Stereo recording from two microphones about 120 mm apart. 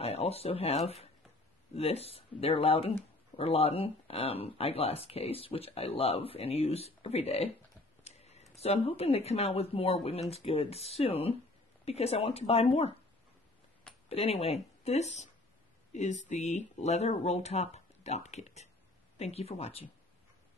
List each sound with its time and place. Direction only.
0.0 s speech: 60° left (ahead or behind)
14.0 s speech: 55° left (ahead or behind)